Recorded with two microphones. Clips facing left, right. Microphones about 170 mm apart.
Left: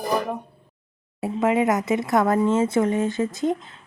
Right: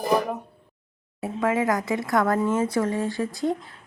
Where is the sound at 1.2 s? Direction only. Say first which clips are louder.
Left 3 dB; 20° left (ahead or behind).